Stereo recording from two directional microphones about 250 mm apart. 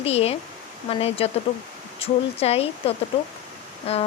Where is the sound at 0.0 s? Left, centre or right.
Left.